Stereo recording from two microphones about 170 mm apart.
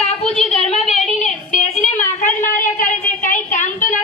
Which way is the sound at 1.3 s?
45° left (ahead or behind).